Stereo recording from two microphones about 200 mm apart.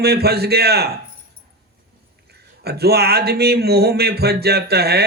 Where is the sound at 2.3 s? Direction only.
55° right (ahead or behind).